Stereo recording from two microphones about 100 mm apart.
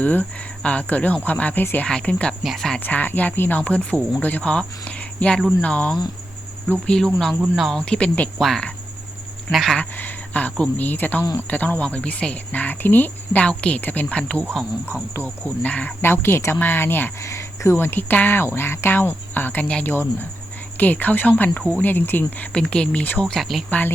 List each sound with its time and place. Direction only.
0.0 s speech: 15° left (ahead or behind)
2.4 s speech: centre (ahead or behind)
2.8 s speech: 15° left (ahead or behind)
8.4 s speech: centre (ahead or behind)
10.0 s speech: 15° left (ahead or behind)
15.4 s speech: 15° left (ahead or behind)
22.5 s speech: 10° left (ahead or behind)
23.6 s speech: 15° left (ahead or behind)